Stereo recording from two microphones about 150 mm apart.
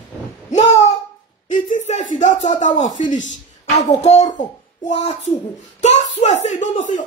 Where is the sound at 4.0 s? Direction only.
45° left (ahead or behind).